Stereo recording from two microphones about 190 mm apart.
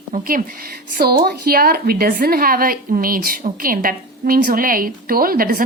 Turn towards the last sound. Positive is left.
turn(degrees=-50)  # may be behind; listen again after turning